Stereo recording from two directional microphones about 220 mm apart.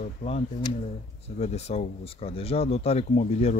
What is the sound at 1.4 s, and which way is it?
Speech, 30° left (ahead or behind).